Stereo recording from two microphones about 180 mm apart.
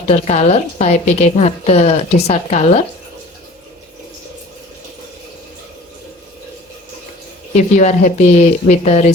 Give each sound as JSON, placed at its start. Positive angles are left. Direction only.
{"t": 0.1, "sound": "a woman's voice", "side_deg": 40}
{"t": 7.5, "sound": "a woman's voice", "side_deg": 40}